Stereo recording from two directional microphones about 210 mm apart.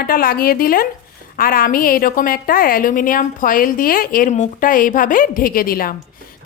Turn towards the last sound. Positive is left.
turn(degrees=45)  # may be behind; listen again after turning